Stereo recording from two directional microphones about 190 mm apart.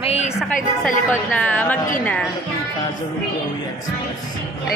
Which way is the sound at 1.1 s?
10° left (ahead or behind).